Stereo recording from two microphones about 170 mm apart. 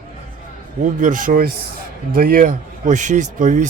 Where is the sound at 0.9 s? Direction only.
50° right (ahead or behind).